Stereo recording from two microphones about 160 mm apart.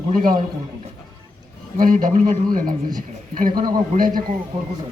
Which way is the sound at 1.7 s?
55° right (ahead or behind).